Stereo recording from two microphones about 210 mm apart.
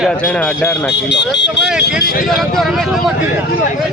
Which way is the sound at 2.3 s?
Centre (ahead or behind).